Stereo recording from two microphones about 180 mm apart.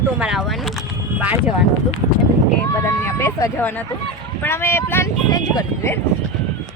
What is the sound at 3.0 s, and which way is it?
Speech, 15° left (ahead or behind).